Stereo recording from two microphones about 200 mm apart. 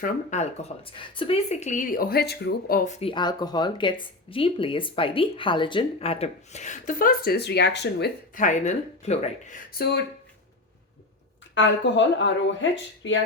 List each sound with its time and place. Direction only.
0.0 s speech: 35° left (ahead or behind); by 8.1 s 55° left (ahead or behind)
8.4 s speech: 35° left (ahead or behind)
9.7 s speech: 55° left (ahead or behind)
11.5 s speech: 65° left (ahead or behind)